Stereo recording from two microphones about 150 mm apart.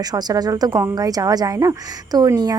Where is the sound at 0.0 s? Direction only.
25° right (ahead or behind).